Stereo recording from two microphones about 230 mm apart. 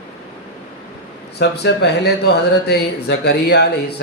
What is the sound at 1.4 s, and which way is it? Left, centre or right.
Speech, left.